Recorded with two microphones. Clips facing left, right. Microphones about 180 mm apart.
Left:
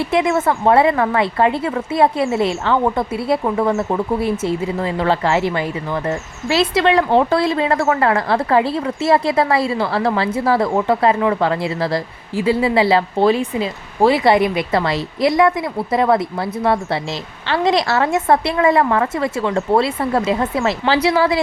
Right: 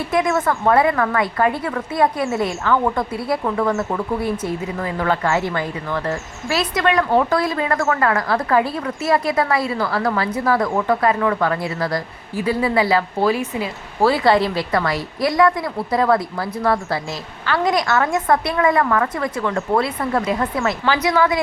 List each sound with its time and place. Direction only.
0.1 s a woman's voice: 25° left (ahead or behind)
14.0 s a woman's voice: 20° left (ahead or behind)